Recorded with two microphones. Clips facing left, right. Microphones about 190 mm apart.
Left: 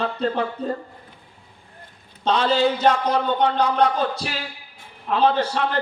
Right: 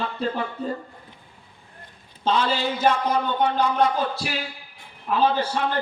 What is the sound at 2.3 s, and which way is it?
Speech, 65° left (ahead or behind).